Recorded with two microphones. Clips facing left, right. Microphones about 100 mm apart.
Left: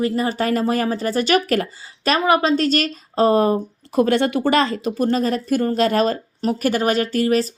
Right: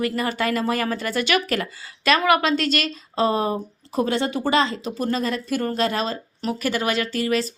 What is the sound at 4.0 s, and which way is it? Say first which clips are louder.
A woman's voice: left 5 dB; 55° left (ahead or behind).